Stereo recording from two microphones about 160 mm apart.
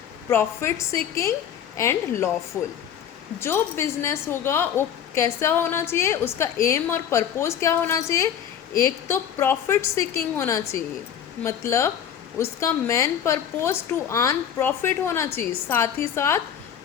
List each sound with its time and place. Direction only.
0.3 s a woman's voice: 15° left (ahead or behind)
3.4 s a woman's voice: 15° left (ahead or behind)